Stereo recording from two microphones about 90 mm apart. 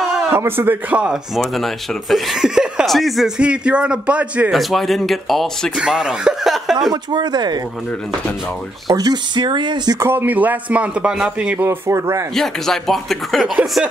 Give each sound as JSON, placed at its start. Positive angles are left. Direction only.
{"t": 0.3, "sound": "speech", "side_deg": -25}
{"t": 1.3, "sound": "speech", "side_deg": 0}
{"t": 3.3, "sound": "a man's voice", "side_deg": -10}
{"t": 4.5, "sound": "speech", "side_deg": 0}
{"t": 6.9, "sound": "speech", "side_deg": -50}
{"t": 8.8, "sound": "speech", "side_deg": -50}
{"t": 9.9, "sound": "a man's voice", "side_deg": -25}
{"t": 11.6, "sound": "speech", "side_deg": -30}
{"t": 12.4, "sound": "speech", "side_deg": 5}